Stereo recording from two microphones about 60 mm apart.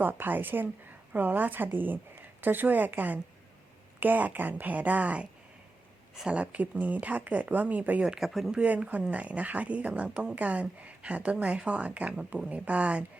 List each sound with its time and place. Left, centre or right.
0.0 s a woman's voice: right
8.0 s speech: centre
8.3 s speech: centre
8.5 s speech: right